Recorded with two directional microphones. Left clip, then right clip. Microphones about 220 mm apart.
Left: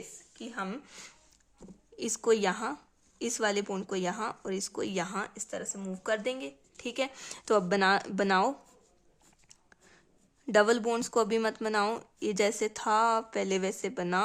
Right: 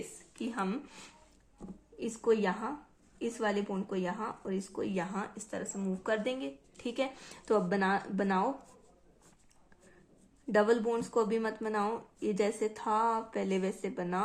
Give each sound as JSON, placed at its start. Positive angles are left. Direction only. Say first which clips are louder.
{"t": 0.3, "sound": "speech", "louder": "right 2 dB", "side_deg": 15}
{"t": 2.0, "sound": "speech", "louder": "left 3 dB", "side_deg": 45}
{"t": 10.4, "sound": "speech", "louder": "left 3 dB", "side_deg": 40}